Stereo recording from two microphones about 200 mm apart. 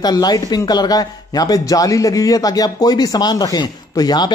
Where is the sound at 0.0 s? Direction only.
20° left (ahead or behind).